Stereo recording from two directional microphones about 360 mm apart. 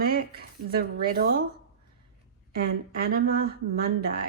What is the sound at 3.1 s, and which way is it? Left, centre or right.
Speech, right.